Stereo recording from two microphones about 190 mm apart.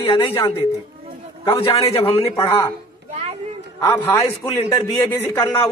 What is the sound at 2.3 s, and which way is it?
Speech, 20° left (ahead or behind).